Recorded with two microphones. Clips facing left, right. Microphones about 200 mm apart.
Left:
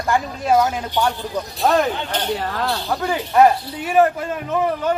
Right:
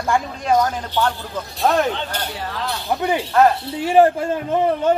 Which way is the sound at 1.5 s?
Centre (ahead or behind).